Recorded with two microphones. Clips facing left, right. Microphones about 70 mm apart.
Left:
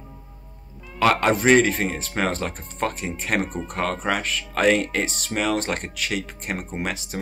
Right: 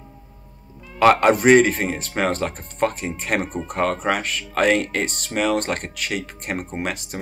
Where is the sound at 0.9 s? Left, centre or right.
Centre.